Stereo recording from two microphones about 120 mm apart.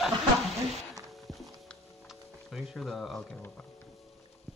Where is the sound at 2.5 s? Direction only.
Centre (ahead or behind).